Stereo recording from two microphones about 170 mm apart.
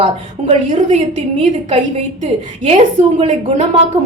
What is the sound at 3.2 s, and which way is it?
Speech, 40° right (ahead or behind).